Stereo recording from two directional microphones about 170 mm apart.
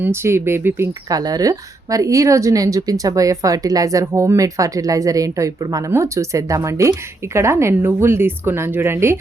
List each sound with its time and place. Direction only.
0.0 s speech: 15° right (ahead or behind)